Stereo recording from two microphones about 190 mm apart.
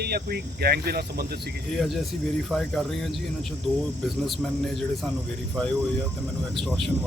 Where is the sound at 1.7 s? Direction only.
Centre (ahead or behind).